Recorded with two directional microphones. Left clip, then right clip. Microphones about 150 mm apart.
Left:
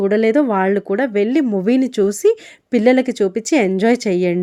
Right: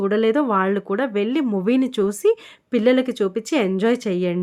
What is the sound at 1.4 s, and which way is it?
Speech, 10° left (ahead or behind).